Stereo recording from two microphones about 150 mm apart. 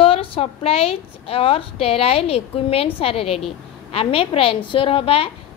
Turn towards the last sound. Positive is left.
turn(degrees=40)  # may be behind; listen again after turning